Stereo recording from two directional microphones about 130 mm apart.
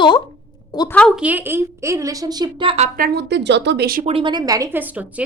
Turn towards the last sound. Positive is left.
turn(degrees=-15)  # may be behind; listen again after turning